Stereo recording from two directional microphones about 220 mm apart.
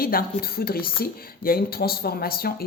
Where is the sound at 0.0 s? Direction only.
40° left (ahead or behind).